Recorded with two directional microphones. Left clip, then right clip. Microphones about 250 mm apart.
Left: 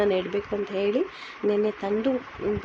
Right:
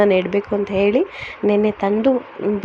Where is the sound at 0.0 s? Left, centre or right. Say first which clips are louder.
Right 8 dB; right.